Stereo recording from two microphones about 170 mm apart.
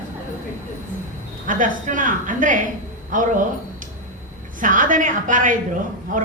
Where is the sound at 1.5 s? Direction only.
50° right (ahead or behind).